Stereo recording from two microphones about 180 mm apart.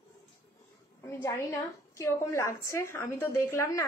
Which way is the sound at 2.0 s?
15° left (ahead or behind).